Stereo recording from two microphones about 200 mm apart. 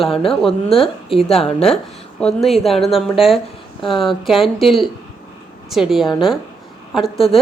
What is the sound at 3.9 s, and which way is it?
Speech, 25° left (ahead or behind).